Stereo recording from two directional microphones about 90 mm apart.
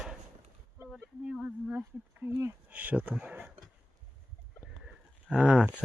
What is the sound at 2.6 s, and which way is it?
Speech, 15° right (ahead or behind).